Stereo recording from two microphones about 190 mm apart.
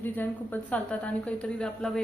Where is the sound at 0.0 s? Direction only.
10° left (ahead or behind).